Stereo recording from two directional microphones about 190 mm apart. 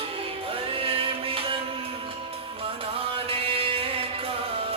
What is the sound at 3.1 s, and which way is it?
Music, 30° right (ahead or behind).